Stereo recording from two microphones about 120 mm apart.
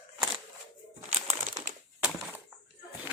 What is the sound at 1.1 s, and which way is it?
Crumpling, 65° right (ahead or behind).